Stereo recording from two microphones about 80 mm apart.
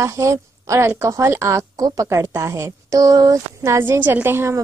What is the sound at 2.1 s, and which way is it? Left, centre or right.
Speech, right.